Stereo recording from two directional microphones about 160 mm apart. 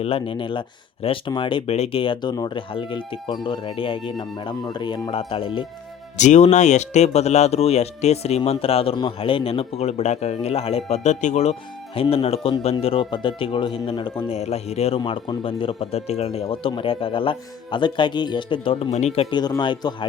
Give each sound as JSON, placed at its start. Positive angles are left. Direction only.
{"t": 0.0, "sound": "speech", "side_deg": 35}
{"t": 6.1, "sound": "speech", "side_deg": 50}
{"t": 14.3, "sound": "speech", "side_deg": 40}